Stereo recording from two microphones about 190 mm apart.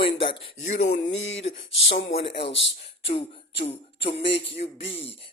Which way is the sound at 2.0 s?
30° left (ahead or behind).